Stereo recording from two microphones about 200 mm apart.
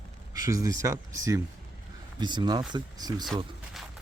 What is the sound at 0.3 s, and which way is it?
Speech, 15° right (ahead or behind).